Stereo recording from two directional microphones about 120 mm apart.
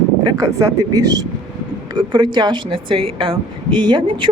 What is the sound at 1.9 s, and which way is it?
Speech, 40° right (ahead or behind).